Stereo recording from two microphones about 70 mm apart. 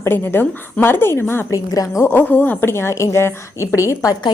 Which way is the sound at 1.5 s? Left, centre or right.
Left.